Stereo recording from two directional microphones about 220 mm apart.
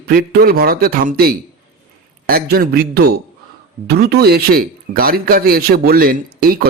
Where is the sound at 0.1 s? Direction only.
45° right (ahead or behind).